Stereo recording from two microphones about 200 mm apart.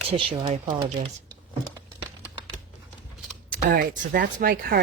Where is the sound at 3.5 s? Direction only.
45° right (ahead or behind).